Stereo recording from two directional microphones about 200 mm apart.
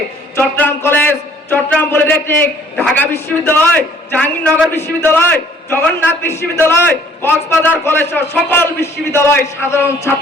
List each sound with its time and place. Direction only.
0.3 s a man's voice: 10° left (ahead or behind)